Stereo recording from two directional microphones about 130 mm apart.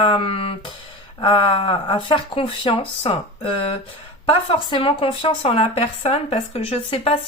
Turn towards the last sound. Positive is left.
turn(degrees=45)  # may be behind; listen again after turning